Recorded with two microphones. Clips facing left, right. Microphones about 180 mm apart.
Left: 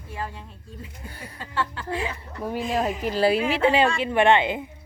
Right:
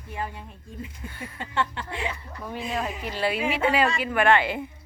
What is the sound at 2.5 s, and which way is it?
A woman's voice, 40° left (ahead or behind).